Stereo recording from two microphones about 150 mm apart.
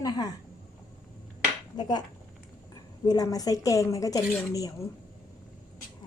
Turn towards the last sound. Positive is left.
turn(degrees=25)  # may be behind; listen again after turning